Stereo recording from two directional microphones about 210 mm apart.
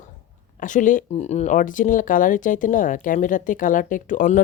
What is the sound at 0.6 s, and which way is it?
Speech, 40° left (ahead or behind).